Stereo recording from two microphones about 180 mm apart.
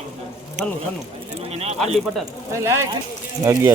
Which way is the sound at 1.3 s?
35° right (ahead or behind).